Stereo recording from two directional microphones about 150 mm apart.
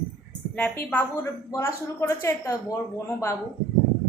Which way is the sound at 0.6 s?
10° left (ahead or behind).